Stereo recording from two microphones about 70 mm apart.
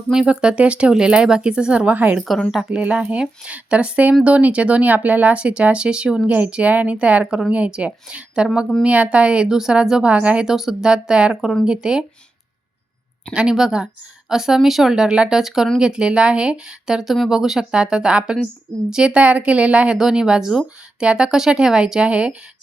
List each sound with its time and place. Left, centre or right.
0.1 s speech: centre
2.5 s speech: centre
10.4 s speech: centre
13.3 s speech: centre